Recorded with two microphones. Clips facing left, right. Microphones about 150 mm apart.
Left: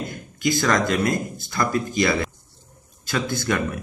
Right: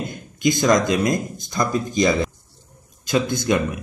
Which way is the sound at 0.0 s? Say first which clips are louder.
Right 4 dB; 20° right (ahead or behind).